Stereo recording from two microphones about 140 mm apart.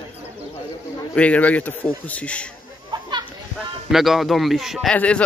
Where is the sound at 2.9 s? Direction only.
30° right (ahead or behind).